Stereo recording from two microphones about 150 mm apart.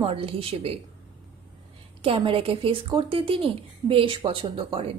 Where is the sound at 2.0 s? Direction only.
35° right (ahead or behind).